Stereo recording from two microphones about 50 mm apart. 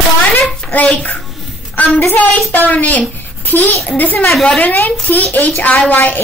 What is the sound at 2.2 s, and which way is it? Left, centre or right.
A woman's voice, left.